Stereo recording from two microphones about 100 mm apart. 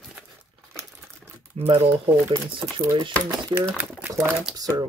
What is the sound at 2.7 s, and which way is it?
Speech, 35° right (ahead or behind).